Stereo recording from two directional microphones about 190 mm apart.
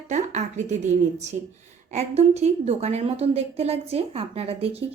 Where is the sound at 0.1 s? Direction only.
40° right (ahead or behind).